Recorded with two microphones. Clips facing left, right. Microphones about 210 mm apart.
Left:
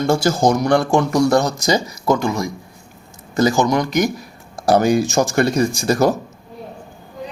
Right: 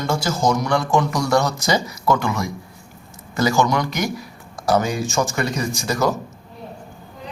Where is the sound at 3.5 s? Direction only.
20° left (ahead or behind).